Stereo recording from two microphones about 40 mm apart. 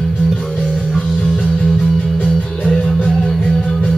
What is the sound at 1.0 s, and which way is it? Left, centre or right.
Music, left.